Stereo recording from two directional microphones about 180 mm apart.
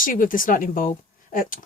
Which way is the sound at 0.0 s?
50° left (ahead or behind).